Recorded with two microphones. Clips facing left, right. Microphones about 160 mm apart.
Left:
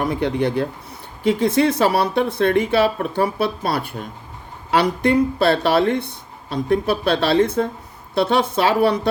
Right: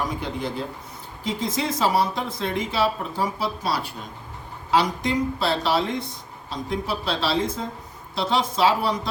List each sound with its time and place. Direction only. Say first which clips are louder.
0.0 s speech: left 8 dB; 65° left (ahead or behind)